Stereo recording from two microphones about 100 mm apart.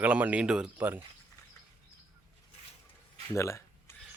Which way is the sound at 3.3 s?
30° left (ahead or behind).